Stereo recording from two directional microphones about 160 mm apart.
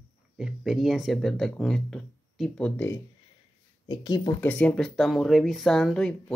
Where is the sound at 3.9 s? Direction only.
25° left (ahead or behind).